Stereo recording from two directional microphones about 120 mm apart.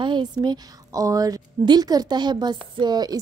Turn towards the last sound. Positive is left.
turn(degrees=-35)  # may be behind; listen again after turning